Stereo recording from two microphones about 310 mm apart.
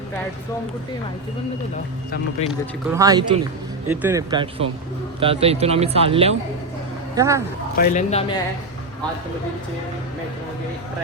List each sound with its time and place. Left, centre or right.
2.5 s speech: centre
7.8 s speech: left